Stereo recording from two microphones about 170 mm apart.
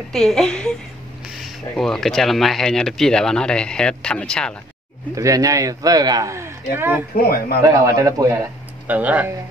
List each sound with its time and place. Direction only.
0.1 s speech: centre (ahead or behind)
5.1 s speech: 20° right (ahead or behind)
7.2 s a man's voice: 60° left (ahead or behind)
7.6 s speech: 20° right (ahead or behind)
8.8 s speech: 10° right (ahead or behind)